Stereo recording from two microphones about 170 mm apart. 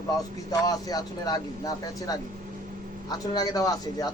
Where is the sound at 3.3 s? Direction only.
20° left (ahead or behind).